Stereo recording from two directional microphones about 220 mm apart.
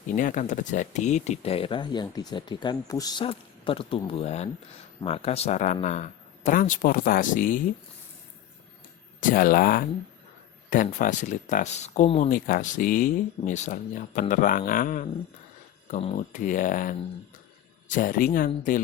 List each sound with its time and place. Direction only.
0.2 s speech: 35° left (ahead or behind)
9.2 s speech: 40° left (ahead or behind)